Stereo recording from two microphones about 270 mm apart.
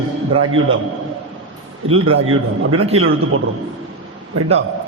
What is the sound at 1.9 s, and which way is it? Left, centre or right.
A man's voice, right.